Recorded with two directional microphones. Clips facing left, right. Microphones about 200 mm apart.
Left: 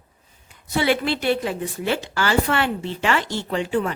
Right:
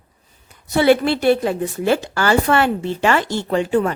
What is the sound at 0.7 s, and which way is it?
A woman's voice, 45° right (ahead or behind).